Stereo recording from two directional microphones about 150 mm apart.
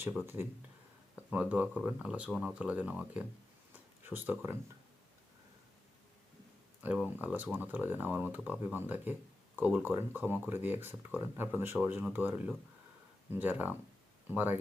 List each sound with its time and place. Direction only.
0.4 s speech: 15° right (ahead or behind)
3.7 s a sound: 15° right (ahead or behind)
6.8 s speech: 10° right (ahead or behind)